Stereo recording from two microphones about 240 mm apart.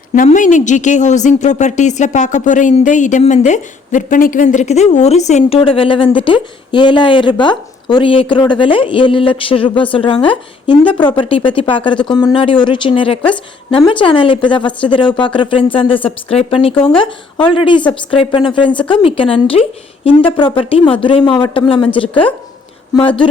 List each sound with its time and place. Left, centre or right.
0.1 s a woman's voice: left
11.2 s a woman's voice: left